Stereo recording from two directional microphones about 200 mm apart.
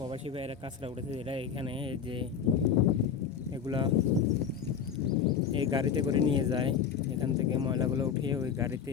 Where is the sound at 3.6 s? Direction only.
25° right (ahead or behind).